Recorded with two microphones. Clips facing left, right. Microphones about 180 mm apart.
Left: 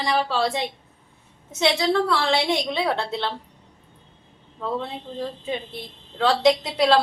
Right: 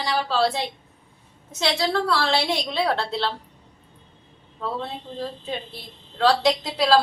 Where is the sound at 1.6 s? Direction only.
20° left (ahead or behind).